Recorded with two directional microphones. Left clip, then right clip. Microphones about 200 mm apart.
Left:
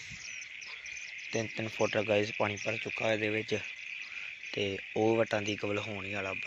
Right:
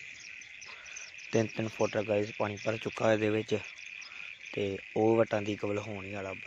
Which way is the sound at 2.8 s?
30° right (ahead or behind).